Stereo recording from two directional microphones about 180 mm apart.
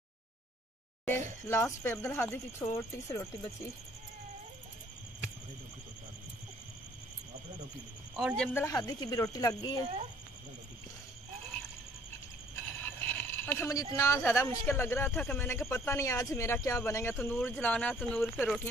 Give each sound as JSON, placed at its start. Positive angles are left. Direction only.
{"t": 1.5, "sound": "speech", "side_deg": 15}
{"t": 8.2, "sound": "speech", "side_deg": 0}
{"t": 8.5, "sound": "speech", "side_deg": 20}
{"t": 12.8, "sound": "a sound", "side_deg": 10}
{"t": 13.9, "sound": "speech", "side_deg": 15}